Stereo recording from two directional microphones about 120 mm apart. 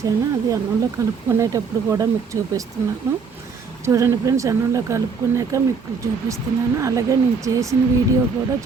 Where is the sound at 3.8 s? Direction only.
25° right (ahead or behind).